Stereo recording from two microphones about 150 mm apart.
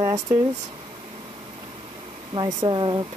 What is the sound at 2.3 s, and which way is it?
Speech, 30° right (ahead or behind).